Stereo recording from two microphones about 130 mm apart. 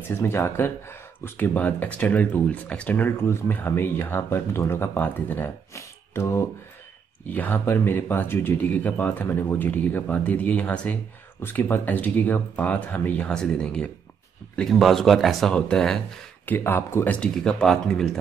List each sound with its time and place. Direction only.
0.1 s speech: 15° left (ahead or behind); by 18.2 s centre (ahead or behind)